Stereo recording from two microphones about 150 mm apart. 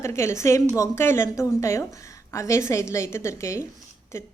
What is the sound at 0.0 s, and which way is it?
A woman's voice, 20° left (ahead or behind).